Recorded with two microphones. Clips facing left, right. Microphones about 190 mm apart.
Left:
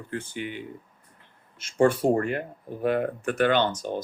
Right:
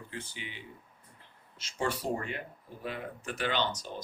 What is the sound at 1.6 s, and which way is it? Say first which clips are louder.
Speech: left 12 dB; 55° left (ahead or behind).